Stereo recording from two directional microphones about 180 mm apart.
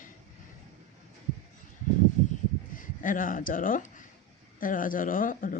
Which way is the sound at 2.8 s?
50° left (ahead or behind).